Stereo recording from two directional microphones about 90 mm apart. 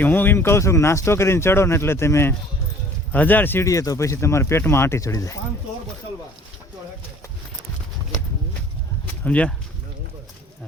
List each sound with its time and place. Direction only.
0.0 s speech: 20° left (ahead or behind)
3.7 s speech: 40° left (ahead or behind)
9.2 s speech: 15° left (ahead or behind)